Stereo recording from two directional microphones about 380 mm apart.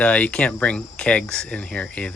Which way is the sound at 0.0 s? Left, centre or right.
Centre.